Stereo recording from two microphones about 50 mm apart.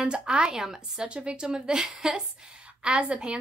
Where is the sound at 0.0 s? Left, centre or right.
Centre.